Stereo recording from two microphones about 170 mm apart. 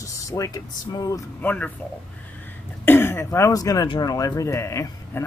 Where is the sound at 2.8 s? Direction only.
15° left (ahead or behind).